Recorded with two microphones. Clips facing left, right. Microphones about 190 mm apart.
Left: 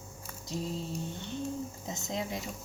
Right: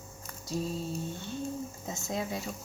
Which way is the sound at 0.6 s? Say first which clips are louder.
Right 1 dB; 15° left (ahead or behind).